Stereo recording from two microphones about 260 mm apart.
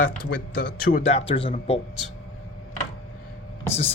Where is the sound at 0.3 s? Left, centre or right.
Left.